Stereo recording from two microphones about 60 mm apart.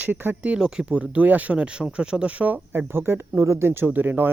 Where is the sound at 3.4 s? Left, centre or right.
Right.